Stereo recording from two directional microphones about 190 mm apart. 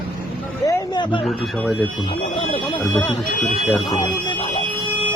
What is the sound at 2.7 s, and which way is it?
Speech, 10° left (ahead or behind).